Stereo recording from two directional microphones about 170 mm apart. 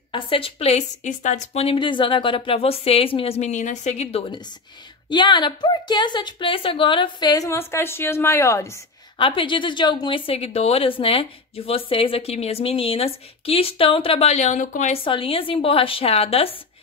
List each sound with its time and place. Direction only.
0.1 s a woman's voice: 30° left (ahead or behind); by 8.7 s 15° left (ahead or behind)
9.2 s speech: 30° left (ahead or behind); by 15.0 s 50° left (ahead or behind)
15.0 s speech: 30° left (ahead or behind)